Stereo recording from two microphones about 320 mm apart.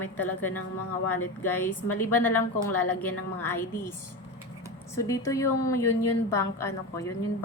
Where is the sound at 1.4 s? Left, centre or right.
Centre.